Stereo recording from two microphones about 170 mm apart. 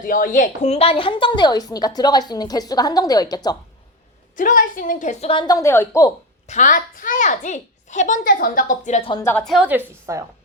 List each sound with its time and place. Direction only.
0.0 s a woman's voice: 50° left (ahead or behind); by 3.6 s 25° left (ahead or behind)
4.4 s a woman's voice: 50° left (ahead or behind)
5.3 s a woman's voice: 25° left (ahead or behind)
6.5 s a woman's voice: 50° left (ahead or behind)
9.0 s a woman's voice: 30° left (ahead or behind)
9.2 s a woman's voice: 5° left (ahead or behind); by 10.2 s 15° right (ahead or behind)